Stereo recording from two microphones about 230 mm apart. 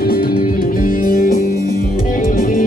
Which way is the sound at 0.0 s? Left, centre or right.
Left.